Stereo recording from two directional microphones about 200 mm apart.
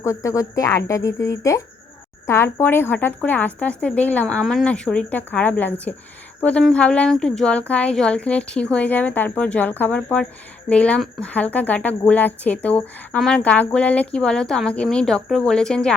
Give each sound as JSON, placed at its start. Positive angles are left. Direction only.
{"t": 0.0, "sound": "a woman's voice", "side_deg": 15}